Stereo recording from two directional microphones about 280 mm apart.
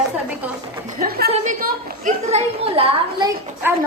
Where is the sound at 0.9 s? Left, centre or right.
Right.